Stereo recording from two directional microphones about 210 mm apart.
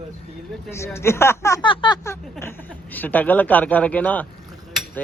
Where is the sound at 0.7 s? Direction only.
15° left (ahead or behind).